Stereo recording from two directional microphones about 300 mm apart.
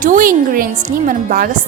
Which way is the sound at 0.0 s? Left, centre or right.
Right.